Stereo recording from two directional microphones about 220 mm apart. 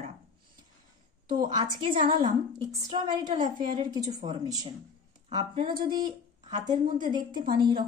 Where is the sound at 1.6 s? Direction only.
25° right (ahead or behind).